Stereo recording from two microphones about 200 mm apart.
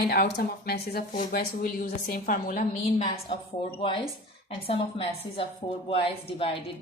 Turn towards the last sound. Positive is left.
turn(degrees=30)  # may be behind; listen again after turning